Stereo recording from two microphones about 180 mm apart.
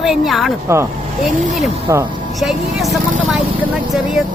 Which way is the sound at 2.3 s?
Centre (ahead or behind).